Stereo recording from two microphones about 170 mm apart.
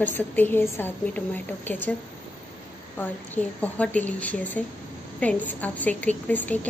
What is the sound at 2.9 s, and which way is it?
A woman's voice, 10° left (ahead or behind).